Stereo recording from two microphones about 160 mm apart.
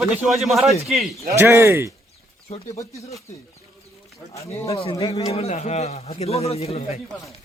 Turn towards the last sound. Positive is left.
turn(degrees=40)  # may be behind; listen again after turning